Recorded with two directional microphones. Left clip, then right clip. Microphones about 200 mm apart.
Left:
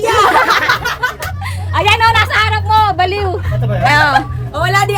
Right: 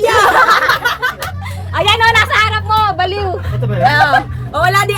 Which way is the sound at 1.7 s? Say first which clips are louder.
Even; 15° left (ahead or behind).